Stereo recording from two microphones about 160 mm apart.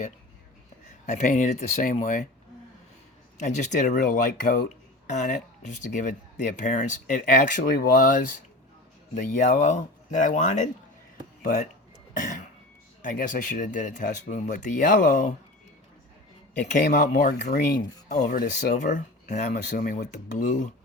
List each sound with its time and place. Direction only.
1.0 s speech: 50° left (ahead or behind)
3.3 s speech: 50° left (ahead or behind)
13.0 s speech: 55° left (ahead or behind)
16.8 s speech: 60° left (ahead or behind)